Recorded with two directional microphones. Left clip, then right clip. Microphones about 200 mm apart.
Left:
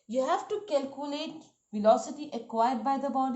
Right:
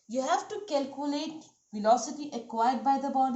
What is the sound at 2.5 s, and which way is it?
Speech, 35° left (ahead or behind).